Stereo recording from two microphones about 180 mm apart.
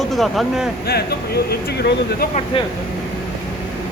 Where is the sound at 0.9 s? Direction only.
60° left (ahead or behind).